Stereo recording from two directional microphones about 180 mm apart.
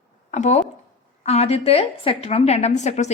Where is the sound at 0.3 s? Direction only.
40° left (ahead or behind).